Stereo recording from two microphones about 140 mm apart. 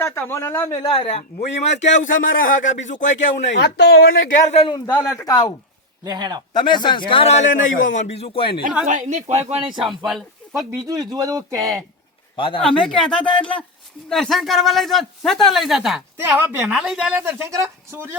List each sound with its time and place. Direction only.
0.0 s a man's voice: 15° left (ahead or behind)
0.8 s a man's voice: 35° left (ahead or behind); by 3.5 s 60° left (ahead or behind)
3.9 s speech: 90° left
4.9 s speech: 10° left (ahead or behind)
5.1 s a man's voice: 25° left (ahead or behind)
6.1 s a man's voice: 30° right (ahead or behind)
6.5 s a man's voice: 35° left (ahead or behind)
8.9 s speech: 60° right (ahead or behind)
9.8 s speech: centre (ahead or behind)
10.5 s speech: 20° right (ahead or behind)
12.4 s a man's voice: 35° left (ahead or behind)
12.6 s speech: 5° left (ahead or behind)
16.3 s a woman's voice: 15° right (ahead or behind)